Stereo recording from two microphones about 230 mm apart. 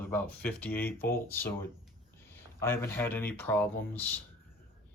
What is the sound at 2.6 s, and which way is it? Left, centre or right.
Speech, centre.